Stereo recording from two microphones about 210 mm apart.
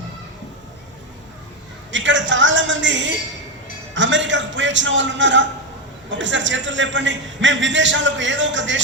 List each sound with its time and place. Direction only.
1.9 s a man's voice: 60° right (ahead or behind)